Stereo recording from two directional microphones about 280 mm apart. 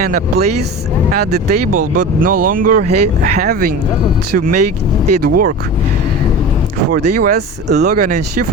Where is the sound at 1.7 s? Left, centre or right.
Right.